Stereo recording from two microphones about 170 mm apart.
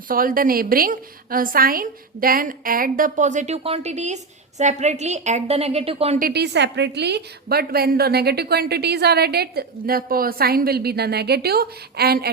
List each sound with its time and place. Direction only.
0.1 s a woman's voice: 55° right (ahead or behind); by 6.1 s 35° right (ahead or behind)
6.1 s a woman's voice: 65° right (ahead or behind)